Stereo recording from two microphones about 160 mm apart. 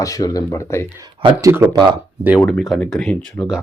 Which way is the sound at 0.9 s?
30° right (ahead or behind).